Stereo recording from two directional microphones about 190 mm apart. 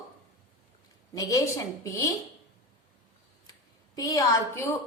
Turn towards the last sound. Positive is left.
turn(degrees=15)  # may be behind; listen again after turning